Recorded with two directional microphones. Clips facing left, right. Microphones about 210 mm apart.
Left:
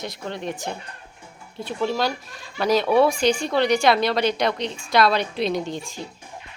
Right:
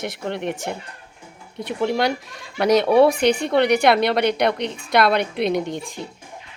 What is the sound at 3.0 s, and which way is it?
A woman's voice, 60° right (ahead or behind).